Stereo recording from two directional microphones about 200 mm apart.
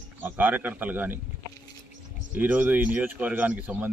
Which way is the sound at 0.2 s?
10° right (ahead or behind).